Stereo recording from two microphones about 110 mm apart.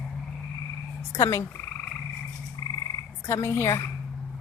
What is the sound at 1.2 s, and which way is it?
Speech, 30° left (ahead or behind).